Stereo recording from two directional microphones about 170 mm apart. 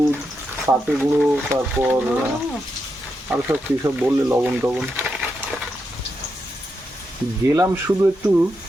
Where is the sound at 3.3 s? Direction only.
15° right (ahead or behind).